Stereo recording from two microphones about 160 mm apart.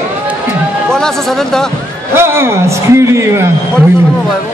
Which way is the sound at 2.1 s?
15° right (ahead or behind).